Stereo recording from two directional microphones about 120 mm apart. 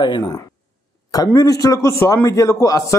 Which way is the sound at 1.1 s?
30° left (ahead or behind).